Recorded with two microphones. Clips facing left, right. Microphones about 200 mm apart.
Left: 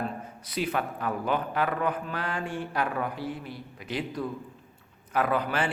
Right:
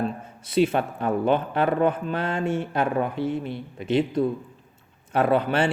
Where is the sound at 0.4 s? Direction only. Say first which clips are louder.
Right 9 dB; 25° right (ahead or behind).